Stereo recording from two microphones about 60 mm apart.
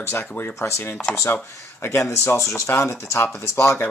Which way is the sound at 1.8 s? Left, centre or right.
Left.